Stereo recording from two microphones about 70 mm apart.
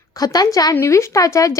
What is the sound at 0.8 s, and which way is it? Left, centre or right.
Speech, left.